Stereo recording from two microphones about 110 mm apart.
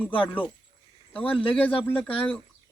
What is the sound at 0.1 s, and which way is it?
Speech, 55° left (ahead or behind).